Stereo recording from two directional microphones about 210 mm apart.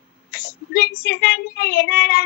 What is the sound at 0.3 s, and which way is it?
A woman's voice, 50° left (ahead or behind).